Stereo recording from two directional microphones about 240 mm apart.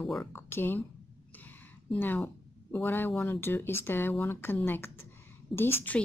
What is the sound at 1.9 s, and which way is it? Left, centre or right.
Speech, centre.